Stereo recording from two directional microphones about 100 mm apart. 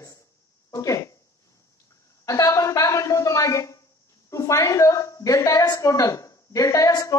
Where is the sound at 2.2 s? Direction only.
35° left (ahead or behind).